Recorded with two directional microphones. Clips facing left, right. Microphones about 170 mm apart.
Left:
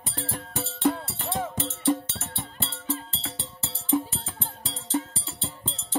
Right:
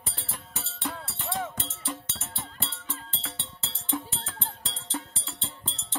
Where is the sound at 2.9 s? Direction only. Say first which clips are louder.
Left 8 dB; 35° left (ahead or behind).